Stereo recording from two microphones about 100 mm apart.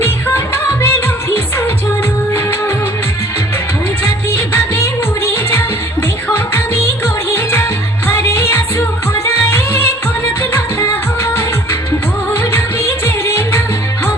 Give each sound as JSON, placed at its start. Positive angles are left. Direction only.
{"t": 0.0, "sound": "music", "side_deg": 25}
{"t": 4.0, "sound": "music", "side_deg": 25}
{"t": 12.4, "sound": "music of bollywood", "side_deg": 25}
{"t": 13.1, "sound": "music", "side_deg": 25}